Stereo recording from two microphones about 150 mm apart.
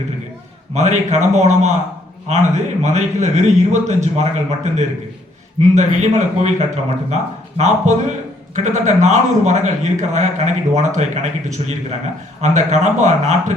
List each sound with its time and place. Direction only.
0.7 s a man's voice: 50° right (ahead or behind)